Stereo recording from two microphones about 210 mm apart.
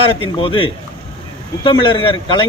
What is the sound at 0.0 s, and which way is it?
Speech, 25° left (ahead or behind).